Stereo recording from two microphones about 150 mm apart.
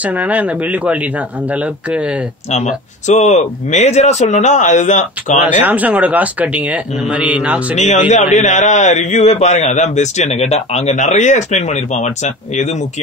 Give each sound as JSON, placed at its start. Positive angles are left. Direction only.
{"t": 0.0, "sound": "speech", "side_deg": -10}
{"t": 2.5, "sound": "a man's voice", "side_deg": 50}
{"t": 5.6, "sound": "speech", "side_deg": -10}
{"t": 7.7, "sound": "a man's voice", "side_deg": 50}